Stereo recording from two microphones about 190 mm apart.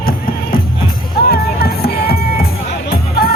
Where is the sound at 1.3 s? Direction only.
55° left (ahead or behind).